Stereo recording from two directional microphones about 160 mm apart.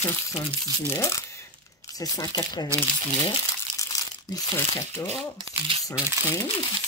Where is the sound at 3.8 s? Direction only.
20° left (ahead or behind).